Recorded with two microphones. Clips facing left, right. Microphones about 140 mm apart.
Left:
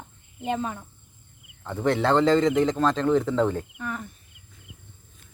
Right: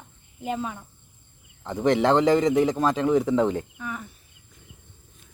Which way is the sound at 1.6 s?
15° right (ahead or behind).